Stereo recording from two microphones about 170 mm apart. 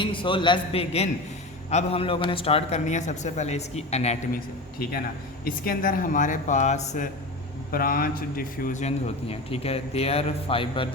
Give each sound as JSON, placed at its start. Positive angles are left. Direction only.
{"t": 0.0, "sound": "a man's voice", "side_deg": 30}
{"t": 5.5, "sound": "speech", "side_deg": 55}
{"t": 7.7, "sound": "a man's voice", "side_deg": 60}
{"t": 9.3, "sound": "a man's voice", "side_deg": 35}